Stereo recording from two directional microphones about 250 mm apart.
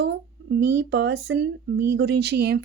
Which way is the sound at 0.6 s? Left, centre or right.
Right.